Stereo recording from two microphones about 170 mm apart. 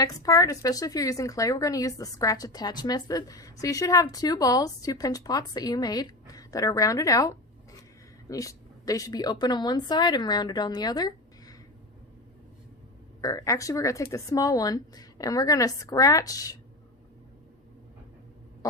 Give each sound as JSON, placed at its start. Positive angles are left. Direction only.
{"t": 0.0, "sound": "speech", "side_deg": 20}
{"t": 13.2, "sound": "speech", "side_deg": 20}
{"t": 18.6, "sound": "a sound", "side_deg": 20}